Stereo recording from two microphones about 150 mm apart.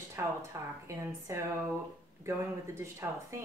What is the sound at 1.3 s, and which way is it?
Speech, 20° right (ahead or behind).